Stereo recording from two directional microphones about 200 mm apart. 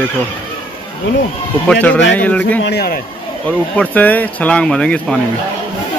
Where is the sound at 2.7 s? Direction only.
55° left (ahead or behind).